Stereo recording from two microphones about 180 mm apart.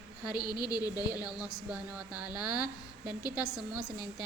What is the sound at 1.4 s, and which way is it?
A woman's voice, 5° right (ahead or behind).